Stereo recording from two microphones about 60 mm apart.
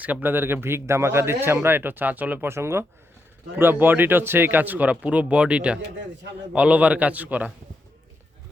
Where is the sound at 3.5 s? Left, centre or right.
Right.